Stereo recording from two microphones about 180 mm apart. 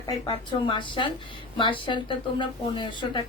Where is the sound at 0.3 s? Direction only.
30° left (ahead or behind).